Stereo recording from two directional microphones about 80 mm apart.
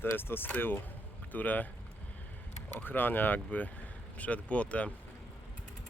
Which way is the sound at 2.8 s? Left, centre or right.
Left.